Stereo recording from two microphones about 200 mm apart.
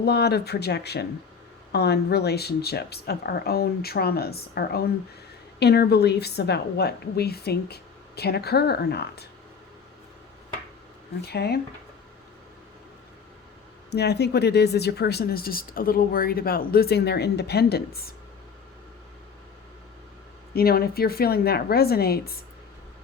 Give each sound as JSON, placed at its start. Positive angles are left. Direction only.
{"t": 0.0, "sound": "a woman's voice", "side_deg": 55}
{"t": 11.2, "sound": "a woman's voice", "side_deg": 55}
{"t": 13.9, "sound": "speech", "side_deg": 55}
{"t": 20.6, "sound": "a woman's voice", "side_deg": 50}